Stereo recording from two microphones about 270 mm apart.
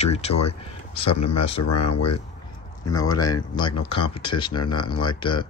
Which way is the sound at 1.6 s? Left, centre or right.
Left.